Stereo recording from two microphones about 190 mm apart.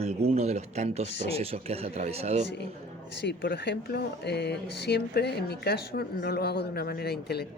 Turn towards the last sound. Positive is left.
turn(degrees=60)  # may be behind; listen again after turning